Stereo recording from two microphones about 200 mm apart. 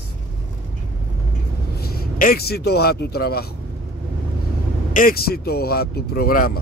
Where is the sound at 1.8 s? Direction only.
50° left (ahead or behind).